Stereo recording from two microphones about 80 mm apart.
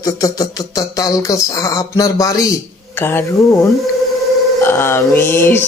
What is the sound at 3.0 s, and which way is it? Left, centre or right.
Speech, left.